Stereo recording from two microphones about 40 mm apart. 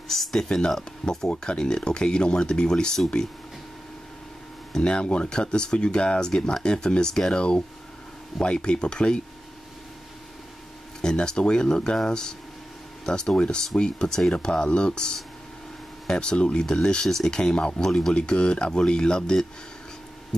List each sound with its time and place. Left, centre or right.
0.1 s speech: centre
4.7 s speech: left
11.0 s speech: centre
17.8 s speech: centre
18.1 s speech: left